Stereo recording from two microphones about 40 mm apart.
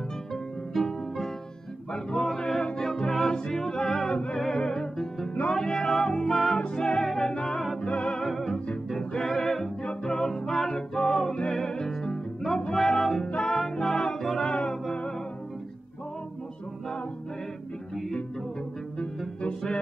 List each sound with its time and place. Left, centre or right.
0.3 s music: centre
1.9 s music: left
4.1 s music: left
4.6 s music: centre
6.6 s music: left
8.3 s music: centre
9.1 s music: centre
18.9 s music: left